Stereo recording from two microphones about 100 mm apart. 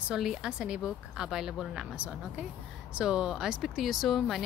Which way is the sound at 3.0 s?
10° right (ahead or behind).